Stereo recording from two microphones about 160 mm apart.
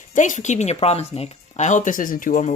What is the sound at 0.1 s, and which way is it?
Speech, 50° left (ahead or behind).